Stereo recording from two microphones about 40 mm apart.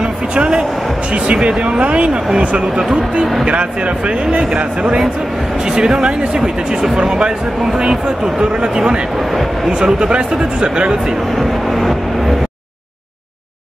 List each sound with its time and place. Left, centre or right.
0.0 s a sound: right
1.1 s speech: right
2.8 s speech: centre
3.4 s speech: right
5.7 s speech: centre
11.3 s vehicle: centre